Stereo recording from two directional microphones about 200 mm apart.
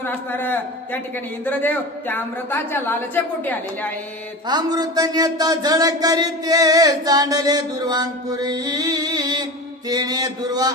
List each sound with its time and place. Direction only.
0.0 s a man's voice: 10° left (ahead or behind)
4.5 s speech: 20° right (ahead or behind)